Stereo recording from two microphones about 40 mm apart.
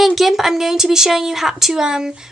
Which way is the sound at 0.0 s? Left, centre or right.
Centre.